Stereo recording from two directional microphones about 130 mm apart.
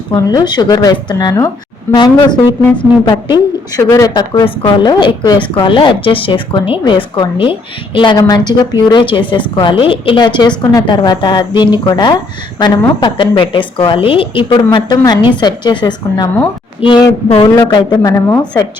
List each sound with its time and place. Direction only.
0.3 s a woman's voice: 35° left (ahead or behind)
14.5 s a woman's voice: 35° left (ahead or behind)
17.2 s speech: 45° left (ahead or behind)
17.7 s a woman's voice: 30° left (ahead or behind)